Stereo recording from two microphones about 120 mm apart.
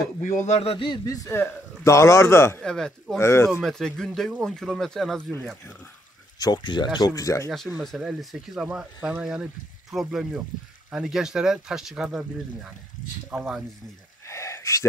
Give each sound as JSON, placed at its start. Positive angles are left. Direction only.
{"t": 0.2, "sound": "speech", "side_deg": 90}
{"t": 0.6, "sound": "speech", "side_deg": 50}
{"t": 1.0, "sound": "speech", "side_deg": 30}
{"t": 2.6, "sound": "speech", "side_deg": 5}
{"t": 3.2, "sound": "speech", "side_deg": 20}
{"t": 3.6, "sound": "speech", "side_deg": 5}
{"t": 6.4, "sound": "speech", "side_deg": 35}
{"t": 7.8, "sound": "speech", "side_deg": 0}
{"t": 14.2, "sound": "a sound", "side_deg": 25}